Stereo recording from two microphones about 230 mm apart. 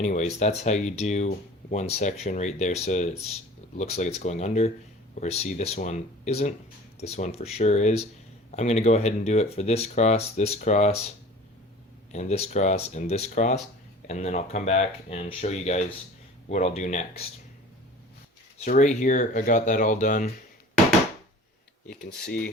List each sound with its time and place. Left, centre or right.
0.0 s speech: left
12.1 s speech: left
18.6 s speech: left
21.8 s speech: left